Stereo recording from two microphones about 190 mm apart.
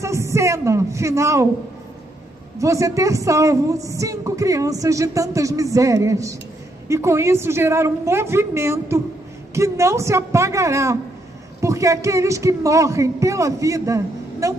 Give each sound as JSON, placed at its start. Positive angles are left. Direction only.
{"t": 0.0, "sound": "a woman's voice", "side_deg": -15}
{"t": 2.6, "sound": "a woman's voice", "side_deg": -15}